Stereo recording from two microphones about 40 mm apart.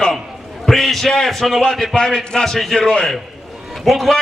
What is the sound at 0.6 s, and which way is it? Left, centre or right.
A man's voice, centre.